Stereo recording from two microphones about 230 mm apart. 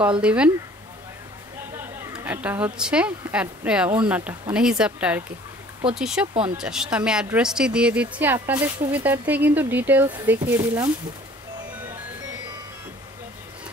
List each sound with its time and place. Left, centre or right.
0.2 s speech: centre
2.1 s speech: centre